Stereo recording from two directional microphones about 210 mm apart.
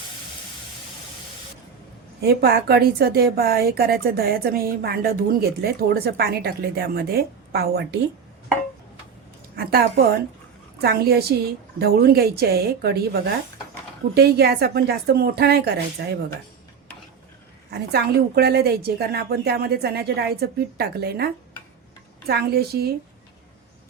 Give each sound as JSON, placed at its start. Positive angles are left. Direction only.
{"t": 2.2, "sound": "a woman's voice", "side_deg": -50}
{"t": 9.6, "sound": "a woman's voice", "side_deg": -50}
{"t": 14.2, "sound": "a woman's voice", "side_deg": -50}
{"t": 17.7, "sound": "a woman's voice", "side_deg": -50}
{"t": 22.3, "sound": "a woman's voice", "side_deg": -50}